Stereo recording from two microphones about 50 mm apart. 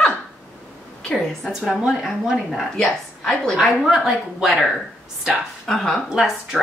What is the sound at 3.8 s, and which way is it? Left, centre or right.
Speech, centre.